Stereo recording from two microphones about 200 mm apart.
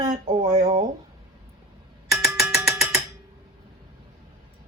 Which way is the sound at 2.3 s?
Centre (ahead or behind).